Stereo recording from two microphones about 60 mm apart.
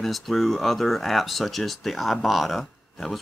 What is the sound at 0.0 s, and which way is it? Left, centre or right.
Speech, centre.